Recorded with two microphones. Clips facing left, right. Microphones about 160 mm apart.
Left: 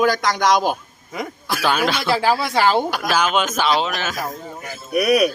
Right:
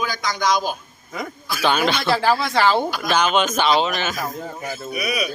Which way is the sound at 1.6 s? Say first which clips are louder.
Right 1 dB; 5° left (ahead or behind).